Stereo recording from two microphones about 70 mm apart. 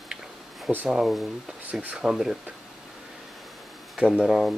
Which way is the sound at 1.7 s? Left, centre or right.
Right.